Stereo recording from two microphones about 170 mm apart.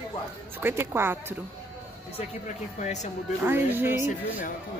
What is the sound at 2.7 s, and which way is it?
Speech, 45° left (ahead or behind).